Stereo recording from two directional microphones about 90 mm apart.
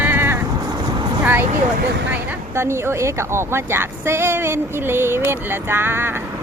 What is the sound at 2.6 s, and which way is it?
Speech, 30° right (ahead or behind).